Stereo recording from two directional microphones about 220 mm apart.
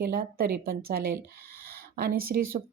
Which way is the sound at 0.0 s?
45° right (ahead or behind).